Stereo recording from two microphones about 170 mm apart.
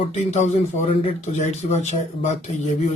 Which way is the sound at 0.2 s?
40° left (ahead or behind).